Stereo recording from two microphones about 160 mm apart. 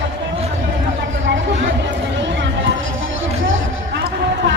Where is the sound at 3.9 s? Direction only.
90° right.